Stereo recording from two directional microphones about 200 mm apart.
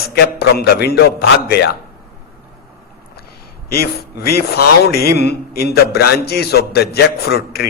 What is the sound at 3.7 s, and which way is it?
A man's voice, 50° left (ahead or behind).